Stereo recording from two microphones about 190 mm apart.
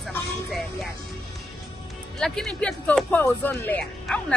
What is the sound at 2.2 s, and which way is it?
Speech, centre (ahead or behind).